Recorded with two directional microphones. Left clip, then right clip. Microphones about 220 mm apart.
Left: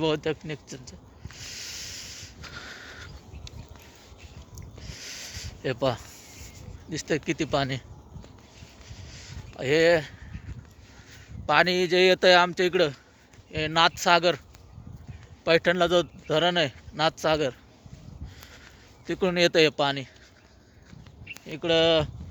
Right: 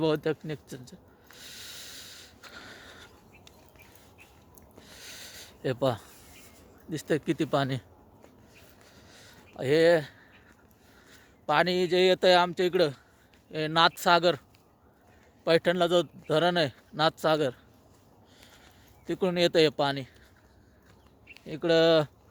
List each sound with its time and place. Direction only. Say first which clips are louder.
0.0 s speech: left 1 dB; 25° right (ahead or behind)
1.4 s a sound: left 6 dB; 25° right (ahead or behind); by 3.5 s 10° right (ahead or behind)
4.9 s a sound: left 6 dB; 20° right (ahead or behind)
6.9 s speech: left 1 dB; 30° right (ahead or behind)
9.0 s a sound: left 7 dB; 30° right (ahead or behind)
11.4 s speech: left 3 dB; 15° right (ahead or behind)
15.4 s speech: left 2 dB; 15° right (ahead or behind)
16.4 s speech: left 2 dB; 25° right (ahead or behind)
19.0 s speech: left 3 dB; 10° right (ahead or behind)
21.4 s speech: left 1 dB; 30° right (ahead or behind)